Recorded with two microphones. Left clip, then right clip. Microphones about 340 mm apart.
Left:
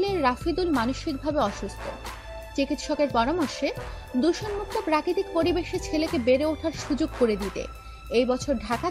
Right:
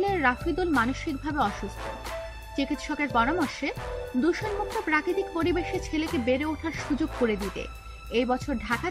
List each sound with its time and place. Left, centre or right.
0.0 s speech: centre
2.5 s speech: centre